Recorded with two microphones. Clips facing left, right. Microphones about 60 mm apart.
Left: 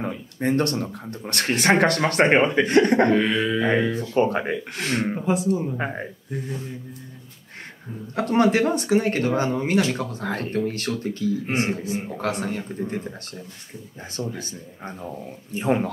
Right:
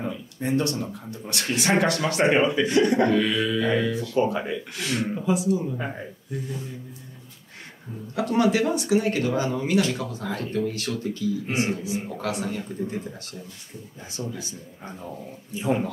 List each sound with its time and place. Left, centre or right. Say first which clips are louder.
0.0 s a sound: left 4 dB; left
0.9 s speech: left 3 dB; left
8.2 s speech: left 2 dB; left
15.5 s speech: left 3 dB; left